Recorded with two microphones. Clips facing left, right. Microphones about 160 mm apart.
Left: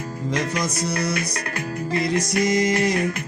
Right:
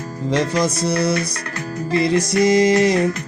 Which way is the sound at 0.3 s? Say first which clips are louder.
Right 7 dB; 30° right (ahead or behind).